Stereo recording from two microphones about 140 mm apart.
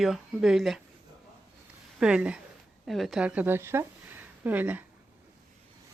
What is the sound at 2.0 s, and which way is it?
A woman's voice, 5° right (ahead or behind).